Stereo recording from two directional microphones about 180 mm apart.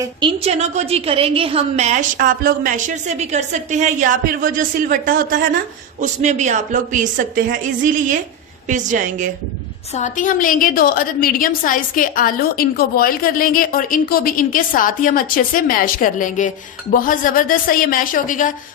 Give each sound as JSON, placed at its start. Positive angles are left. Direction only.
{"t": 0.0, "sound": "a woman's voice", "side_deg": -25}
{"t": 9.9, "sound": "a woman's voice", "side_deg": 45}